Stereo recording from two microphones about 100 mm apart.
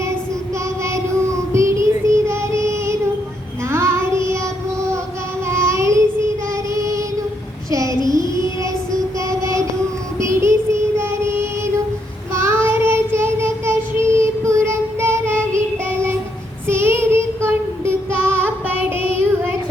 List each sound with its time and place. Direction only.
0.9 s child singing: 30° right (ahead or behind)
5.5 s child singing: 25° right (ahead or behind)